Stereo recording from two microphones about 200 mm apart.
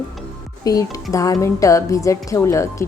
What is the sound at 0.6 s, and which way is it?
Speech, 15° left (ahead or behind).